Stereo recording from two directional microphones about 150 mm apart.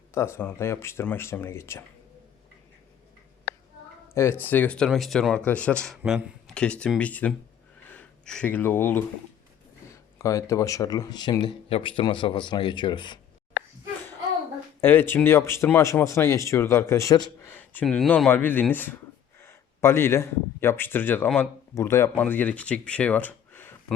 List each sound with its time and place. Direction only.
0.1 s speech: 15° left (ahead or behind)
4.1 s speech: 15° left (ahead or behind)
14.8 s speech: 15° left (ahead or behind)
17.4 s a sound: 10° left (ahead or behind)
18.3 s speech: 10° left (ahead or behind)